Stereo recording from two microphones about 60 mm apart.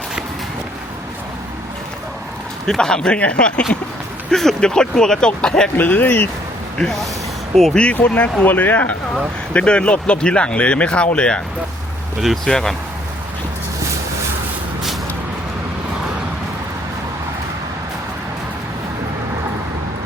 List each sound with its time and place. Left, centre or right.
2.6 s speech: centre
5.7 s speech: left
6.7 s speech: centre
7.9 s speech: left
12.5 s speech: centre